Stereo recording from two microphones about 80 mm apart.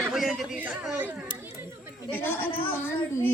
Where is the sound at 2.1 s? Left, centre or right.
Left.